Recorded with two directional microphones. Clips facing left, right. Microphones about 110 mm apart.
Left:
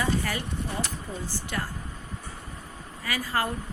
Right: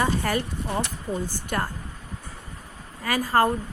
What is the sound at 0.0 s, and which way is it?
Speech, 50° right (ahead or behind).